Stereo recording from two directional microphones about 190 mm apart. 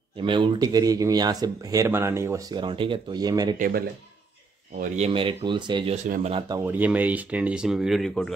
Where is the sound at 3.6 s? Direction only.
50° right (ahead or behind).